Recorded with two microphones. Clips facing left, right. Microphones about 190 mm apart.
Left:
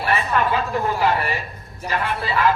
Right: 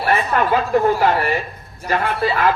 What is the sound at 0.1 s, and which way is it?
Speech, 45° right (ahead or behind).